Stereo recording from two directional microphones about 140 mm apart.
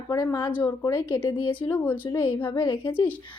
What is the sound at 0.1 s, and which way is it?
A woman's voice, 25° left (ahead or behind).